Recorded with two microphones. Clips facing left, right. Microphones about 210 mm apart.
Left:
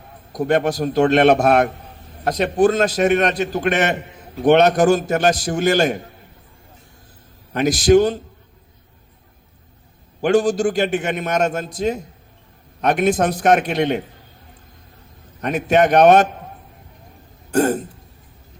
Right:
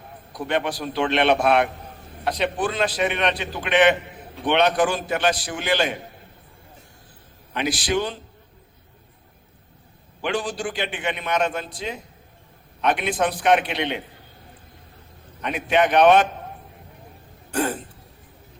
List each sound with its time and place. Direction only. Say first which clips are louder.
0.3 s a man's voice: left 7 dB; 45° left (ahead or behind)
7.5 s a man's voice: left 10 dB; 45° left (ahead or behind)
10.2 s a man's voice: left 10 dB; 45° left (ahead or behind)
15.4 s a man's voice: left 5 dB; 45° left (ahead or behind)
17.5 s a man's voice: left 7 dB; 45° left (ahead or behind)